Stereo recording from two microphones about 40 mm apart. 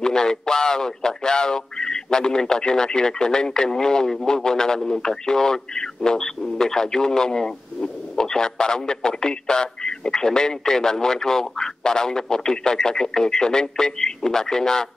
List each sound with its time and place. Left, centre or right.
0.0 s a man's voice: centre